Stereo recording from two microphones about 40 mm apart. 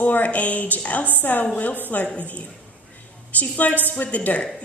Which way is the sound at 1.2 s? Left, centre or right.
Left.